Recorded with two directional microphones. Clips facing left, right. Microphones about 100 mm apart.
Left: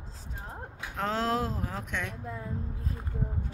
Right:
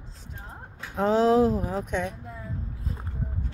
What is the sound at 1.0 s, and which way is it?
Speech, 15° right (ahead or behind).